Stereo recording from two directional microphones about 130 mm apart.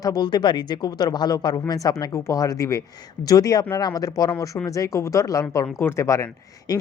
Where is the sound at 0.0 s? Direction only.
30° left (ahead or behind).